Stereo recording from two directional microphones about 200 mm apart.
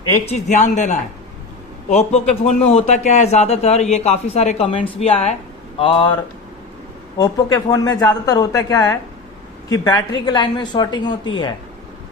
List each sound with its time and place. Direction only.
0.3 s a man's voice: 35° left (ahead or behind)
7.2 s a woman's voice: 20° left (ahead or behind)